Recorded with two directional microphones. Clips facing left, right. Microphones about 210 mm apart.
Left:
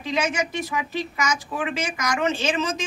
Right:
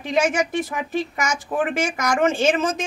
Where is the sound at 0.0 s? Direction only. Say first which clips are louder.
Right 4 dB; 50° right (ahead or behind).